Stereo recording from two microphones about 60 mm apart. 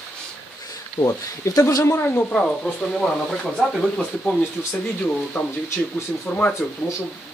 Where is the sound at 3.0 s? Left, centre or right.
Centre.